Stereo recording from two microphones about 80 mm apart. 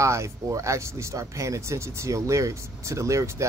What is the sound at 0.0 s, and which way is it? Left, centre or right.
Speech, right.